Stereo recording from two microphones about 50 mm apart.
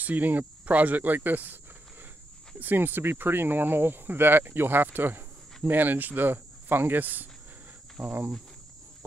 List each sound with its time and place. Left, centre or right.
0.0 s speech: right